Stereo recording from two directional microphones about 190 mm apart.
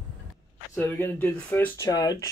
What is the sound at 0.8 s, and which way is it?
Speech, 10° left (ahead or behind).